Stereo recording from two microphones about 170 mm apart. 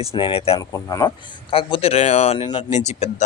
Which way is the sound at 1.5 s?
35° left (ahead or behind).